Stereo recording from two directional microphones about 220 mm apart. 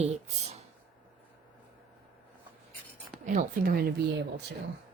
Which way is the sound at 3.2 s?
40° right (ahead or behind).